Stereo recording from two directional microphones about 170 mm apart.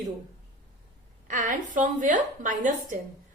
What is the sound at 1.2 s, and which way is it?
A woman's voice, 50° right (ahead or behind).